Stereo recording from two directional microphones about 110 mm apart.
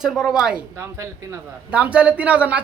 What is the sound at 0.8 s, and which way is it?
Speech, 25° right (ahead or behind).